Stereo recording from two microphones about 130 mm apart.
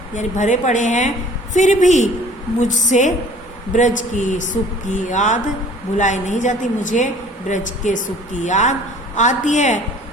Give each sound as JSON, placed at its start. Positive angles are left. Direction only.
{"t": 0.1, "sound": "a woman's voice", "side_deg": 70}